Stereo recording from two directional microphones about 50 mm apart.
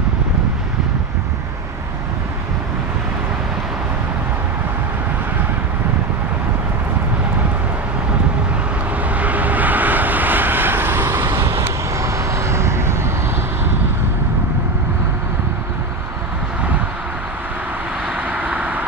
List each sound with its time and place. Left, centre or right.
9.1 s vehicle: right
11.4 s vehicle: right
18.1 s vehicle: right